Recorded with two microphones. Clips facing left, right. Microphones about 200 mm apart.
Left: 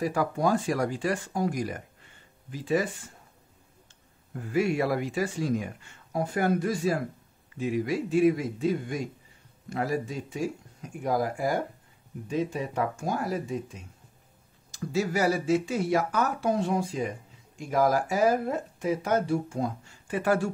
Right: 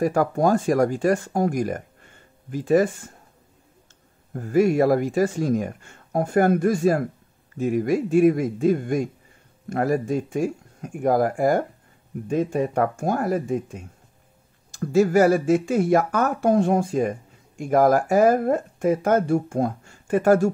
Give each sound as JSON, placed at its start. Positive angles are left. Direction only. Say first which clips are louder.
{"t": 0.0, "sound": "speech", "louder": "right 6 dB", "side_deg": -50}
{"t": 4.3, "sound": "speech", "louder": "right 7 dB", "side_deg": -45}